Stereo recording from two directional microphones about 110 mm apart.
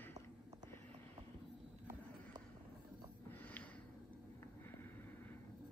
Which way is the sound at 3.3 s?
15° left (ahead or behind).